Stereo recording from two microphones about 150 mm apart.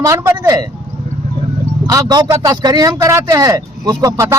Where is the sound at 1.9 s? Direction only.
25° right (ahead or behind).